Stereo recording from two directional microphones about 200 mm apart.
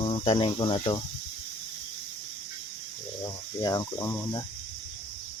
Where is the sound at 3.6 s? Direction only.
20° left (ahead or behind).